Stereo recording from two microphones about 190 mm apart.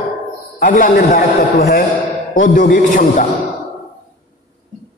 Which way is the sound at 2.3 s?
45° left (ahead or behind).